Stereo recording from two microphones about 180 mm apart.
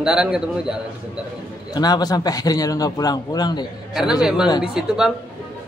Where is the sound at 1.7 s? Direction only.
20° left (ahead or behind).